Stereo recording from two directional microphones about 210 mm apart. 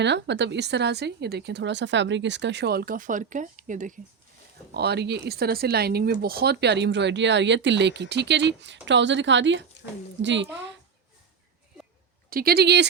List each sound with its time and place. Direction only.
0.0 s speech: 55° right (ahead or behind); by 3.9 s 40° right (ahead or behind)
4.7 s speech: 50° right (ahead or behind)
12.3 s speech: 45° right (ahead or behind)